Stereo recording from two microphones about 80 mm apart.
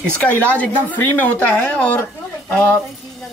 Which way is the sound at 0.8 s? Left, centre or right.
Left.